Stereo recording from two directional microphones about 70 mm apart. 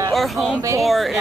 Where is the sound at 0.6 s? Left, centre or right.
Right.